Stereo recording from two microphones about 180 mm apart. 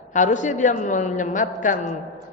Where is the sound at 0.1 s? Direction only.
45° left (ahead or behind).